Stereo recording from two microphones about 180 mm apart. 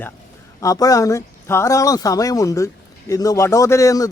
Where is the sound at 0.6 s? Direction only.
20° left (ahead or behind).